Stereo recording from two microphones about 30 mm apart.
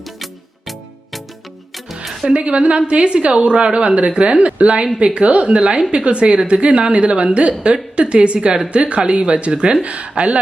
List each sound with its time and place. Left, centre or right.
0.2 s music: centre
2.3 s a woman's voice: right
9.8 s speech: right